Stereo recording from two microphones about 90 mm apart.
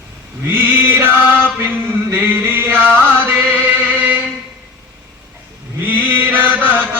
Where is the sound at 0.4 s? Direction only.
20° right (ahead or behind).